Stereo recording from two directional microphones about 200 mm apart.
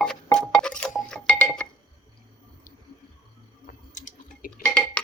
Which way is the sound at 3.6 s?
40° left (ahead or behind).